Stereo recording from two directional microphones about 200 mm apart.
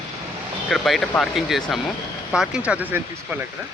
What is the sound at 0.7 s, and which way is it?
Speech, centre (ahead or behind).